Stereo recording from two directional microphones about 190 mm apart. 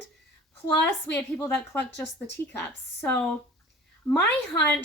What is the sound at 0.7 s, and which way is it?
A woman's voice, 10° left (ahead or behind).